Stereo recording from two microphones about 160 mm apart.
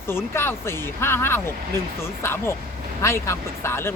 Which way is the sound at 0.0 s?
15° left (ahead or behind).